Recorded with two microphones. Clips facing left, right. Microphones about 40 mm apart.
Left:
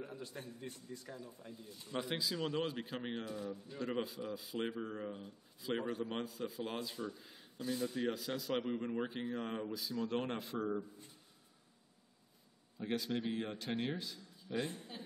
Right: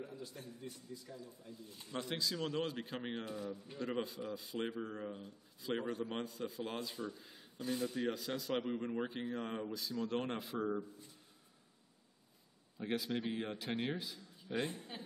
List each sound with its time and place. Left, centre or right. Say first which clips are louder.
0.0 s a man's voice: left 1 dB; left
1.9 s speech: left 1 dB; centre
7.5 s speech: even; right
7.8 s speech: left 1 dB; centre
12.7 s speech: even; centre
14.5 s a woman's voice: right 1 dB; right